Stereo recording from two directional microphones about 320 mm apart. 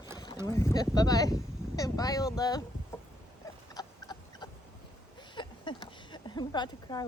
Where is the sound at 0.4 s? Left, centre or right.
Centre.